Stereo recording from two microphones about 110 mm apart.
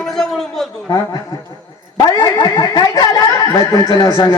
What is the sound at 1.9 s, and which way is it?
A woman's voice, 40° left (ahead or behind).